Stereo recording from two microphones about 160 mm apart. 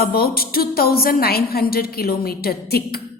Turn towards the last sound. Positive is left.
turn(degrees=75)  # may be behind; listen again after turning